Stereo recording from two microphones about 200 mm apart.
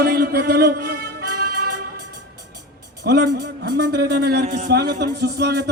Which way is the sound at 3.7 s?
55° right (ahead or behind).